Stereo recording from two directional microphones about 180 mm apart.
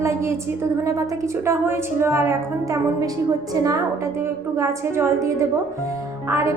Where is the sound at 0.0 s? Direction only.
15° right (ahead or behind).